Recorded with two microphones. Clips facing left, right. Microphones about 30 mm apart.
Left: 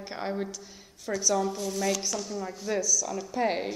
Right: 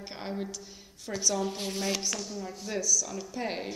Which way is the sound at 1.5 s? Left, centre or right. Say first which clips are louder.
Left 3 dB; right.